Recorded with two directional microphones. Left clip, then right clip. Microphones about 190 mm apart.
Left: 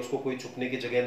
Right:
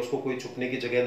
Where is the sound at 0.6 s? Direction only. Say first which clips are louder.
Right 1 dB; 15° left (ahead or behind).